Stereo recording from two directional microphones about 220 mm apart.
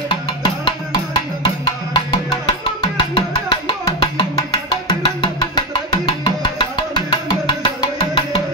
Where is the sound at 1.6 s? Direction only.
25° left (ahead or behind).